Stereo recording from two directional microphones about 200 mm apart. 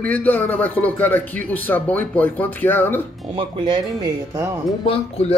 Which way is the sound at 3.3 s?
20° right (ahead or behind).